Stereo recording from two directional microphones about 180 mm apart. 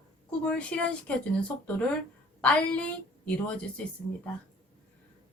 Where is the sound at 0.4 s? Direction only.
5° left (ahead or behind).